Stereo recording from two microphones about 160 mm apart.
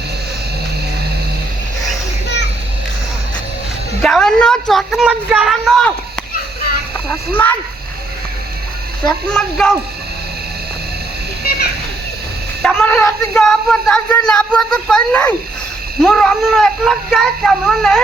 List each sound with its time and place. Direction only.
4.0 s speech: 5° left (ahead or behind)
9.0 s speech: 5° left (ahead or behind)
12.6 s speech: 5° left (ahead or behind)